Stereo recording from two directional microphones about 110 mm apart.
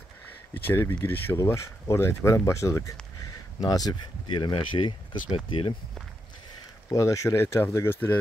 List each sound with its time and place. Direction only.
0.7 s speech: 20° left (ahead or behind); by 5.8 s 55° left (ahead or behind)
6.9 s speech: 30° left (ahead or behind)